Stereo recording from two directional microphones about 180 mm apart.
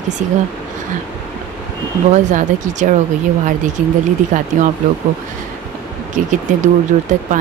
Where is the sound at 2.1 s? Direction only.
45° right (ahead or behind).